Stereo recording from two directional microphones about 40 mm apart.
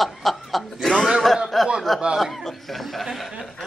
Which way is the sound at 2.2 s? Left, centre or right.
Centre.